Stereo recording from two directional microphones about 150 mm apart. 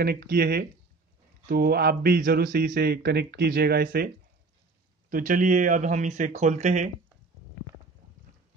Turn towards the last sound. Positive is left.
turn(degrees=-55)  # may be behind; listen again after turning